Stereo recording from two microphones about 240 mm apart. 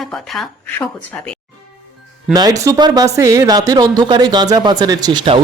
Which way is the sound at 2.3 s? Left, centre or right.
Centre.